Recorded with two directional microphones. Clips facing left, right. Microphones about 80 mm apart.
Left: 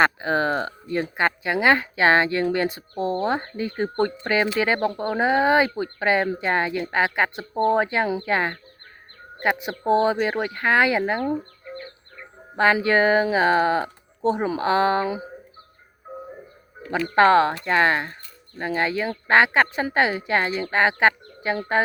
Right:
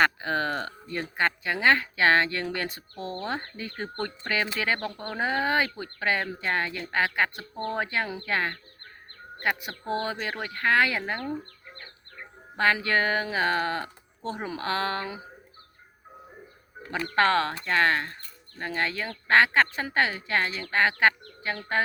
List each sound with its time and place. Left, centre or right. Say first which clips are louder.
0.0 s speech: left 4 dB; left
12.5 s speech: left 6 dB; left
17.2 s speech: left 7 dB; centre